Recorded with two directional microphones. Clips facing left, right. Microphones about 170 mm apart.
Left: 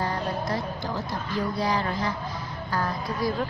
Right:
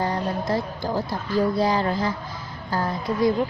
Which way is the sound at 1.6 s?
25° right (ahead or behind).